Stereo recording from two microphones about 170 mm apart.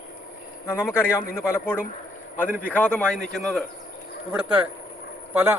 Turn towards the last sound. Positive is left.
turn(degrees=-10)  # may be behind; listen again after turning